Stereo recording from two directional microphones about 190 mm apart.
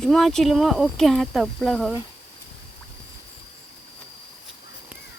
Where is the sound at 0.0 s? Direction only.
Centre (ahead or behind).